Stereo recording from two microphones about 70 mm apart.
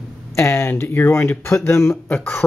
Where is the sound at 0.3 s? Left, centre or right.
Left.